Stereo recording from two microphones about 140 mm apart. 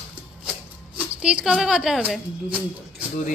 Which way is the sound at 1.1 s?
10° right (ahead or behind).